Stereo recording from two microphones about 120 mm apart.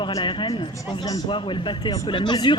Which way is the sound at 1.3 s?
45° left (ahead or behind).